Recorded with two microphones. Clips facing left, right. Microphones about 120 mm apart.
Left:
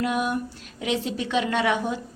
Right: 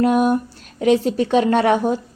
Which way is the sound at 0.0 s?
45° right (ahead or behind).